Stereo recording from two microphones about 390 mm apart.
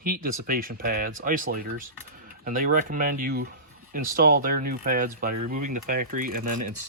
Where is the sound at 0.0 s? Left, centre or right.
Right.